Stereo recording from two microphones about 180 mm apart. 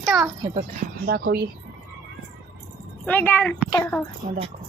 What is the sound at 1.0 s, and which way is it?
Speech, 60° right (ahead or behind).